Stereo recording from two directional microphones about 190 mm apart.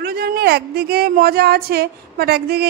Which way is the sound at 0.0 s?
55° right (ahead or behind).